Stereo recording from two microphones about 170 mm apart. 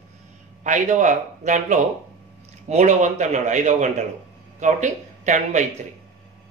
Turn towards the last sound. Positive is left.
turn(degrees=-45)  # may be behind; listen again after turning